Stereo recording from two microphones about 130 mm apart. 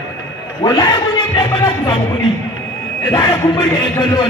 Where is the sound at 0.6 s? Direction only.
35° left (ahead or behind).